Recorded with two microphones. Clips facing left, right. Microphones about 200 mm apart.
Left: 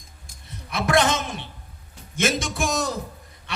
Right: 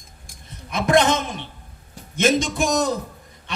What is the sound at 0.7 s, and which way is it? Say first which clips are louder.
A man's voice: right 3 dB; 20° right (ahead or behind).